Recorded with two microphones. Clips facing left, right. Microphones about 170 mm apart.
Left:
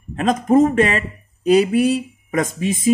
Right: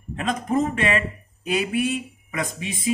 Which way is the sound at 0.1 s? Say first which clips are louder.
Left 8 dB; 45° left (ahead or behind).